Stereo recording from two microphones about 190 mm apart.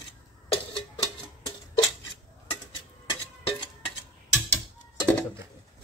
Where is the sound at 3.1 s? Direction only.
20° left (ahead or behind).